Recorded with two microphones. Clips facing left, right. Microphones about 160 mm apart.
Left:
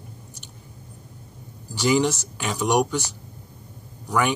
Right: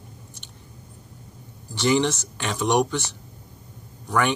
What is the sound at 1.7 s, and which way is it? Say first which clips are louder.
Speech: even; 10° left (ahead or behind).